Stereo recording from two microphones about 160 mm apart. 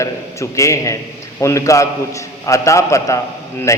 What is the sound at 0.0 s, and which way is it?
A man's voice, 20° left (ahead or behind).